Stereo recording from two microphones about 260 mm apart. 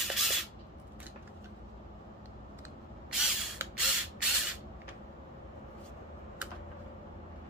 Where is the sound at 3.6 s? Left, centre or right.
Centre.